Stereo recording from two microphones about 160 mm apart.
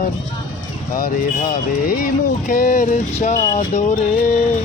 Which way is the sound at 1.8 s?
60° left (ahead or behind).